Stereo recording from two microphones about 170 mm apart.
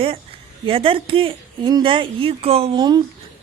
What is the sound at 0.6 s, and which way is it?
Speech, 35° right (ahead or behind).